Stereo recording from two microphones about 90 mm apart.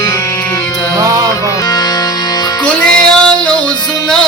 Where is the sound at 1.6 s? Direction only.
45° left (ahead or behind).